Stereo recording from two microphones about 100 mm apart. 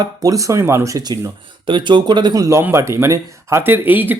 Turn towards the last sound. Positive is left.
turn(degrees=-20)  # may be behind; listen again after turning